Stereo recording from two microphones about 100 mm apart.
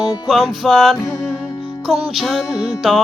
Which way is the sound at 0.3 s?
Centre (ahead or behind).